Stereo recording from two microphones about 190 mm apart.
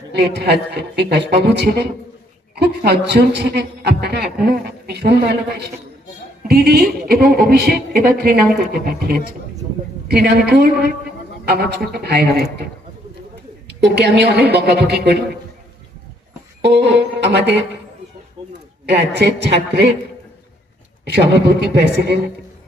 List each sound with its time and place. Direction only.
0.2 s a woman's voice: 60° right (ahead or behind)
13.7 s a woman's voice: 60° right (ahead or behind)
16.6 s music: 60° right (ahead or behind)
18.4 s chicken: 30° right (ahead or behind)
18.9 s a woman's voice: 65° right (ahead or behind)
21.0 s a woman's voice: 60° right (ahead or behind)